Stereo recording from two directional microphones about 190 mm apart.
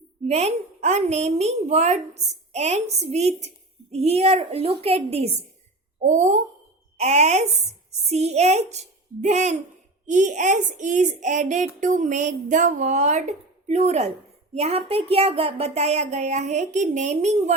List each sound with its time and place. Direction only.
0.3 s a woman's voice: 35° right (ahead or behind)